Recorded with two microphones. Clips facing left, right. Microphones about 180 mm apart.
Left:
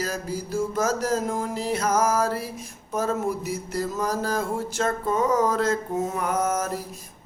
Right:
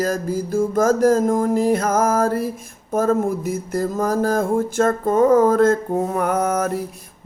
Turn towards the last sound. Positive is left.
turn(degrees=-60)  # may be behind; listen again after turning